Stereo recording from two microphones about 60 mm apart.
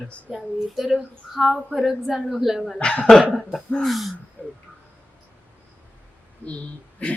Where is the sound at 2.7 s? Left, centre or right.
Centre.